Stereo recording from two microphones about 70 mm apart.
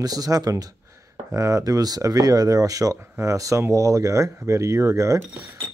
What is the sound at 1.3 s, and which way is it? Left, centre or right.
Speech, right.